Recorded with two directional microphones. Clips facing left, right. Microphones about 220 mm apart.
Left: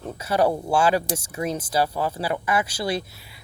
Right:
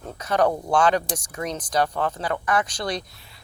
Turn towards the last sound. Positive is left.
turn(degrees=5)  # may be behind; listen again after turning